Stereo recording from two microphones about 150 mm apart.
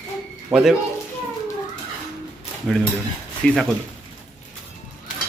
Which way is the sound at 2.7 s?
5° left (ahead or behind).